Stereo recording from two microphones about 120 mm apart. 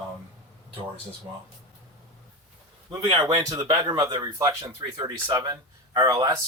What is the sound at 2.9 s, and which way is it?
Speech, 40° right (ahead or behind).